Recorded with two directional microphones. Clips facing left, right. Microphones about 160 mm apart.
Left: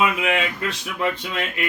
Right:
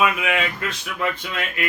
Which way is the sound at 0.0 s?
25° left (ahead or behind).